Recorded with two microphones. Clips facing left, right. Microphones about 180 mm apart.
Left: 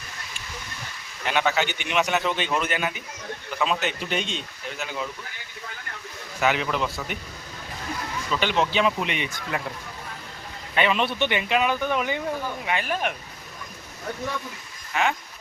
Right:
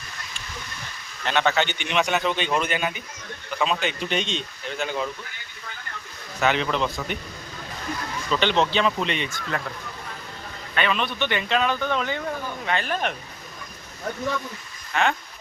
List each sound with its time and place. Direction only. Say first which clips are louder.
1.2 s speech: right 1 dB; 10° left (ahead or behind)
6.4 s speech: right 1 dB; 10° left (ahead or behind)
8.4 s speech: right 1 dB; 10° left (ahead or behind)
10.8 s speech: left 2 dB; 20° left (ahead or behind)
14.9 s speech: right 1 dB; 5° left (ahead or behind)